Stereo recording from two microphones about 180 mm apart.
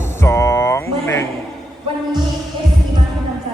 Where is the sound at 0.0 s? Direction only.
15° left (ahead or behind).